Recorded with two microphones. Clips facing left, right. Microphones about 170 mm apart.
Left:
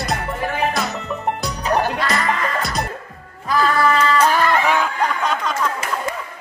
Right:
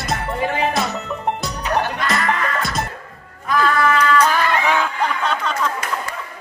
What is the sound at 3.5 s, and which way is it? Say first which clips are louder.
Music: even; 35° left (ahead or behind).